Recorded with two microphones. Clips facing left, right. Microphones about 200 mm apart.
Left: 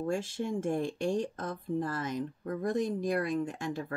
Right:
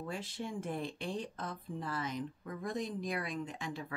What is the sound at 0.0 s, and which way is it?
Speech, 45° left (ahead or behind).